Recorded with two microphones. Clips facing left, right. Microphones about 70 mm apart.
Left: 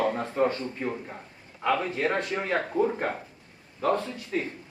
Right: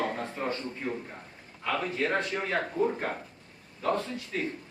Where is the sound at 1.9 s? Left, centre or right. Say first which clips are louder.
Left 2 dB; left.